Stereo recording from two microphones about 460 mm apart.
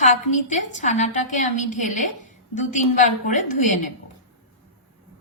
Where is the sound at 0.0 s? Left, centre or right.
Centre.